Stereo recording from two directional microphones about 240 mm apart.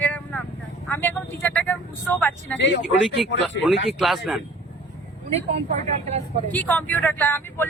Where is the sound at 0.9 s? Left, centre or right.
Centre.